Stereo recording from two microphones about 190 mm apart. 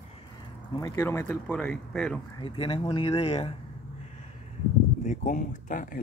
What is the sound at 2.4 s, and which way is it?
Speech, 30° left (ahead or behind).